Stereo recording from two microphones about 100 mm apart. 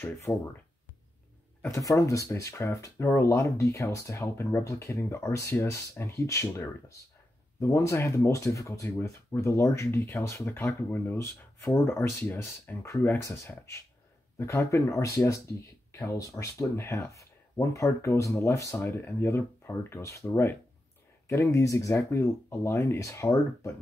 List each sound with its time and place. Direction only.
0.3 s speech: 40° left (ahead or behind)
1.7 s speech: 35° left (ahead or behind)